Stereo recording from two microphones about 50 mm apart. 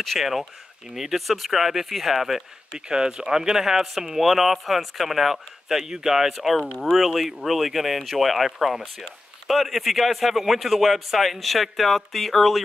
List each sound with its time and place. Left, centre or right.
0.0 s speech: centre
2.9 s speech: centre